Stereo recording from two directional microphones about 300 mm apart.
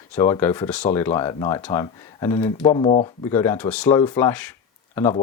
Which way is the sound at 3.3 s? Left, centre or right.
Centre.